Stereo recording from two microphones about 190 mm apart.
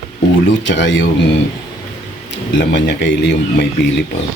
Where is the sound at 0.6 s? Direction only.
75° left (ahead or behind).